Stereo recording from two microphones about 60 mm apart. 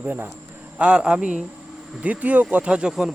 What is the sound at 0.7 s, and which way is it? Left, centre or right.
Speech, centre.